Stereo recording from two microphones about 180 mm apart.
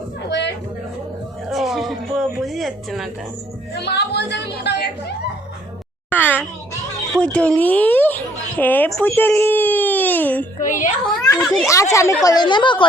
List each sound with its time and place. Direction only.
0.3 s a sound: 75° left (ahead or behind)
1.5 s a sound: centre (ahead or behind)
3.8 s a woman's voice: 70° left (ahead or behind)
6.1 s a child's voice: 10° left (ahead or behind)
10.6 s a child's voice: 45° left (ahead or behind)
11.3 s speech: centre (ahead or behind)
11.7 s a woman's voice: 15° left (ahead or behind)